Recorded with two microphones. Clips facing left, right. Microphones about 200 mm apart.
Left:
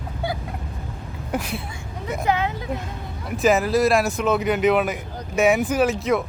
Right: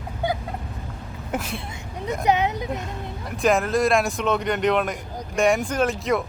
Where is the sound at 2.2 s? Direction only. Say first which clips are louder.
Right 2 dB; 20° right (ahead or behind).